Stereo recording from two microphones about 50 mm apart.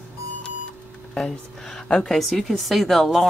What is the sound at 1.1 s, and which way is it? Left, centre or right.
A woman's voice, centre.